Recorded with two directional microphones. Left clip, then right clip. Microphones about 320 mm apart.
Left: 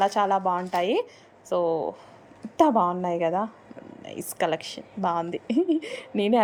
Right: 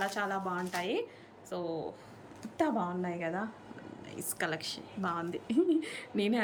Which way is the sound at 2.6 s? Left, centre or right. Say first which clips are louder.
Left 12 dB; centre.